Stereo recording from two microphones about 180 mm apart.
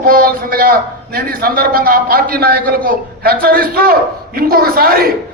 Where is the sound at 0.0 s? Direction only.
55° right (ahead or behind).